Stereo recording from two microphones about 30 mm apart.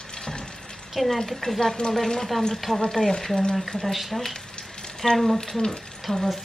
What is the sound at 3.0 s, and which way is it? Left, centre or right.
Speech, left.